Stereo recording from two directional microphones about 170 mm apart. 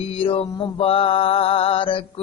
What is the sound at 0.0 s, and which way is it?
Mantra, 35° left (ahead or behind).